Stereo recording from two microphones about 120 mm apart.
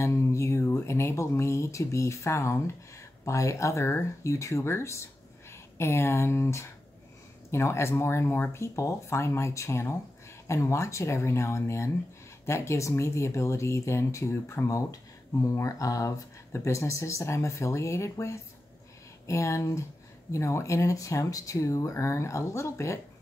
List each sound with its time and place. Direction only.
0.0 s speech: 25° left (ahead or behind)